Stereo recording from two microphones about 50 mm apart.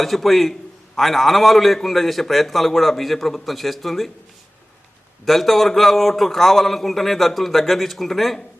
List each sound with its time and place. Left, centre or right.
0.0 s a man's voice: centre
5.2 s a man's voice: centre